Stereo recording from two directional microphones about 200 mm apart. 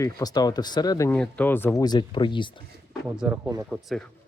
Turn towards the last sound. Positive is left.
turn(degrees=0)  # may be behind; listen again after turning